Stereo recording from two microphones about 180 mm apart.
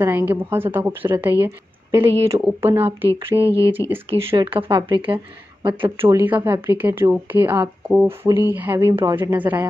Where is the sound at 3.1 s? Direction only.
15° left (ahead or behind).